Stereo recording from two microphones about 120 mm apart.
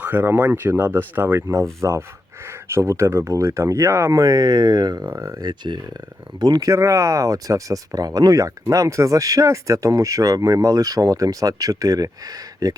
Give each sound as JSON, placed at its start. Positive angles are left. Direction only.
{"t": 0.0, "sound": "speech", "side_deg": -15}